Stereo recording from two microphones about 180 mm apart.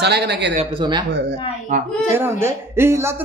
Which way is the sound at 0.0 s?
65° right (ahead or behind).